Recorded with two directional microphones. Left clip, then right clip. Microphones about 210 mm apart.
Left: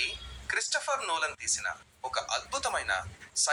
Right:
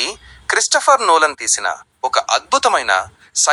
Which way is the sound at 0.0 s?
50° right (ahead or behind).